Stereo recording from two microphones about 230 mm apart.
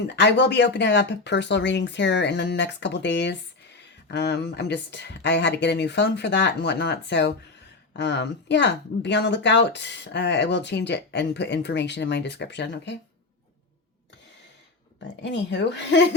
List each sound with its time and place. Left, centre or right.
0.1 s speech: left
15.0 s speech: left